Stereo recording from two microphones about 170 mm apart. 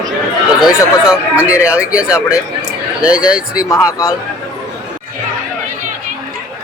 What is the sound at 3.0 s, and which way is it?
Speech, 5° right (ahead or behind).